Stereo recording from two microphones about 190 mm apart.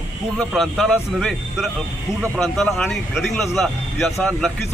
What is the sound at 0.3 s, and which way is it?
Speech, centre (ahead or behind).